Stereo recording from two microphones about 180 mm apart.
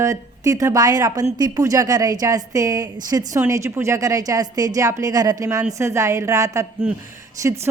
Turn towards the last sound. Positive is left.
turn(degrees=-20)  # may be behind; listen again after turning